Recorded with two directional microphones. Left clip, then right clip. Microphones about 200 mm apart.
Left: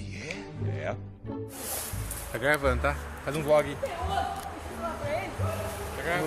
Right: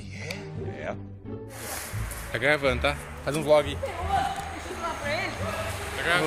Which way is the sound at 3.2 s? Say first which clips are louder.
Right 3 dB; 50° right (ahead or behind).